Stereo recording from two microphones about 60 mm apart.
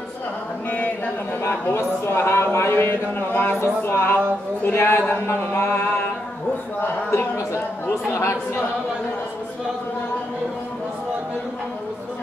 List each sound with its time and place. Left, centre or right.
0.7 s chant: left
1.7 s speech: left
3.6 s speech: left
4.7 s a sound: left
6.8 s speech: left
8.1 s speech: left